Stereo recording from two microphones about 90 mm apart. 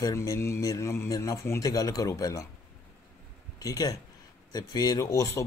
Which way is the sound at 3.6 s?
40° left (ahead or behind).